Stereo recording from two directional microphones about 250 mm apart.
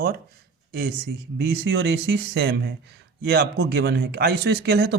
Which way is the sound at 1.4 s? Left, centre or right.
Right.